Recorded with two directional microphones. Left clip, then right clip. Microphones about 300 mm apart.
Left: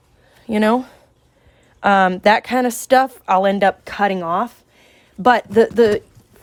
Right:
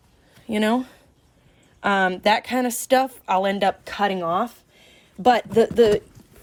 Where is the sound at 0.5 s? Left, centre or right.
Centre.